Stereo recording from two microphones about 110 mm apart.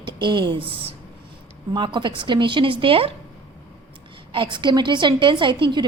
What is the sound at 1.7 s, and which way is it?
A woman's voice, 45° right (ahead or behind).